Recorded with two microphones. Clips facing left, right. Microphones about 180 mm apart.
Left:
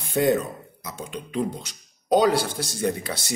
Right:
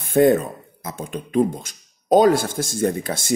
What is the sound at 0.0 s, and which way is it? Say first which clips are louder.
Speech: right 6 dB; 50° right (ahead or behind).